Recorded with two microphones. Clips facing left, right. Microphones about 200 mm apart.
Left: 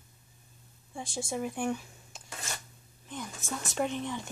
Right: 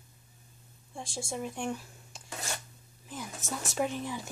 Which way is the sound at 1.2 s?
5° left (ahead or behind).